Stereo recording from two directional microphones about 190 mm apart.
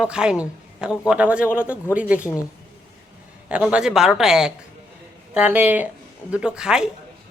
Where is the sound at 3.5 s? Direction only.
5° right (ahead or behind).